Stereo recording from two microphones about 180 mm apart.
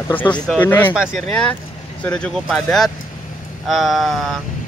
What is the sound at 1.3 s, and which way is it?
Speech, 5° left (ahead or behind).